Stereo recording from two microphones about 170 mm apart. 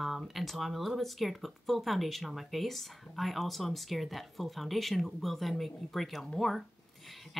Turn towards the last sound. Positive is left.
turn(degrees=0)  # may be behind; listen again after turning